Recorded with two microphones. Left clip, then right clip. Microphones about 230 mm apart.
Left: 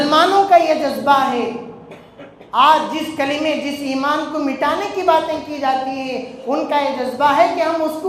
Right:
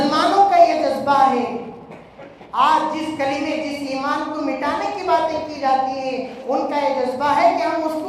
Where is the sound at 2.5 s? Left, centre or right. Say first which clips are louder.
Left 4 dB; left.